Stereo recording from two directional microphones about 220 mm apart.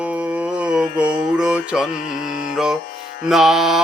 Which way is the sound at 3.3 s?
Centre (ahead or behind).